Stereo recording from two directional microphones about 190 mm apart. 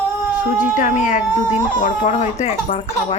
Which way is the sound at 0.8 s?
40° left (ahead or behind).